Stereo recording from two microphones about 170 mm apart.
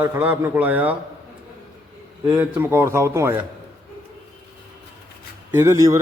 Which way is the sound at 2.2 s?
5° right (ahead or behind).